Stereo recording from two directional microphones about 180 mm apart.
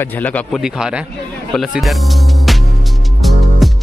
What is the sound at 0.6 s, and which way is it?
Speech, 5° right (ahead or behind).